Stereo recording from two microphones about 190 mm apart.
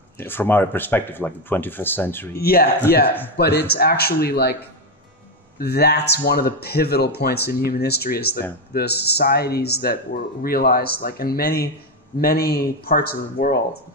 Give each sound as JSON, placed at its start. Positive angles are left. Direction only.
{"t": 0.2, "sound": "speech", "side_deg": 10}
{"t": 2.3, "sound": "speech", "side_deg": 55}